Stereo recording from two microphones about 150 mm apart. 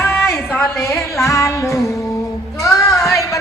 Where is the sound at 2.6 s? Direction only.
20° left (ahead or behind).